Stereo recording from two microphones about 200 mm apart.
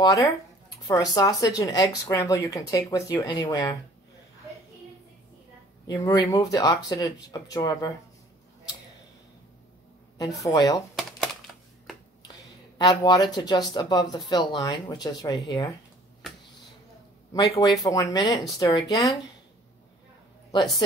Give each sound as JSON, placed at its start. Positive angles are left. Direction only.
{"t": 0.0, "sound": "speech", "side_deg": 20}
{"t": 5.9, "sound": "speech", "side_deg": 15}
{"t": 10.5, "sound": "speech", "side_deg": 15}
{"t": 11.0, "sound": "computer keyboard", "side_deg": 0}
{"t": 12.7, "sound": "speech", "side_deg": 20}
{"t": 17.3, "sound": "speech", "side_deg": 15}